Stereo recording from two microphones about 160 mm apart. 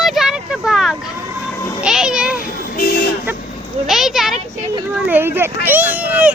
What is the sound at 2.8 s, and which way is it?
Speech, 70° left (ahead or behind).